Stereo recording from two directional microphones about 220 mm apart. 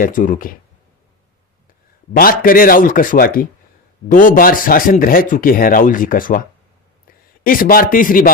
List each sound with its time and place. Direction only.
0.0 s speech: 35° left (ahead or behind)
2.1 s speech: 40° left (ahead or behind)
7.4 s speech: 40° left (ahead or behind)